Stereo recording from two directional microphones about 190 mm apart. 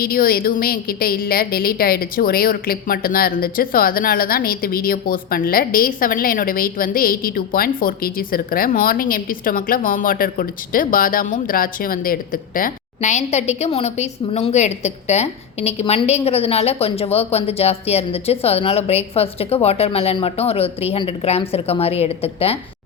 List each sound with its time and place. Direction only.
0.0 s a woman's voice: 50° left (ahead or behind); by 22.5 s 30° left (ahead or behind)